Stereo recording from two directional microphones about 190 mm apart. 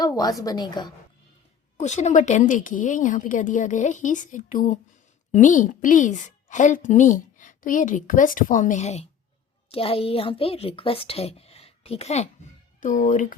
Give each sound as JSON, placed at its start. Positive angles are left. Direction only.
{"t": 0.0, "sound": "a woman's voice", "side_deg": 20}
{"t": 1.8, "sound": "a woman's voice", "side_deg": 40}